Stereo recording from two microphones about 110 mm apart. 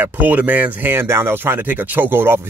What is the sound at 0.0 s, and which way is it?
Speech, 15° right (ahead or behind).